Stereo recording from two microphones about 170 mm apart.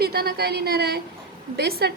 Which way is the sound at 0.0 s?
70° right (ahead or behind).